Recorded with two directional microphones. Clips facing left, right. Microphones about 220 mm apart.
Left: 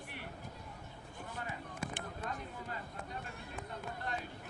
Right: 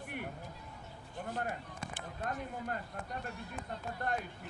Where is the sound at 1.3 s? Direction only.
50° right (ahead or behind).